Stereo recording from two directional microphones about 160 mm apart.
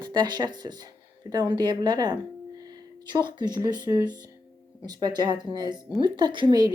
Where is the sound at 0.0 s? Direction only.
25° right (ahead or behind).